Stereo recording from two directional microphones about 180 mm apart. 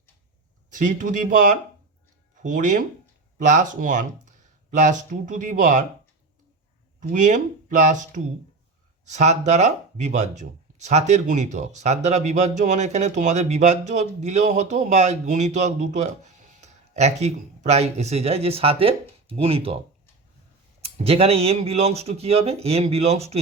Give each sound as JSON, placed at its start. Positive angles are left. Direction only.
{"t": 0.8, "sound": "speech", "side_deg": -45}
{"t": 7.1, "sound": "speech", "side_deg": -45}
{"t": 20.8, "sound": "speech", "side_deg": -35}